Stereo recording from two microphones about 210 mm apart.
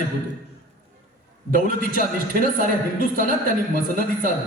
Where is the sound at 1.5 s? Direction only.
40° right (ahead or behind).